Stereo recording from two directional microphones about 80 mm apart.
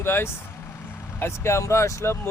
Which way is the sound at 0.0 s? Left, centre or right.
Left.